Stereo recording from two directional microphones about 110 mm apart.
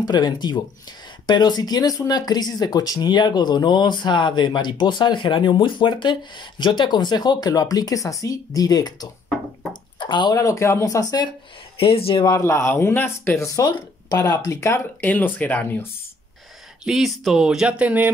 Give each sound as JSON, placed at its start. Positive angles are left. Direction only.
{"t": 0.0, "sound": "speech", "side_deg": 40}
{"t": 9.9, "sound": "drip", "side_deg": 45}
{"t": 10.3, "sound": "speech", "side_deg": 30}
{"t": 11.8, "sound": "speech", "side_deg": 55}
{"t": 12.4, "sound": "speech", "side_deg": 25}
{"t": 13.5, "sound": "speech", "side_deg": 35}
{"t": 14.1, "sound": "speech", "side_deg": 15}
{"t": 14.4, "sound": "speech", "side_deg": 30}
{"t": 15.0, "sound": "speech", "side_deg": 15}
{"t": 16.8, "sound": "speech", "side_deg": 0}